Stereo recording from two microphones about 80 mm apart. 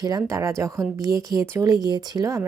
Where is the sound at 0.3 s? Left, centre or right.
Right.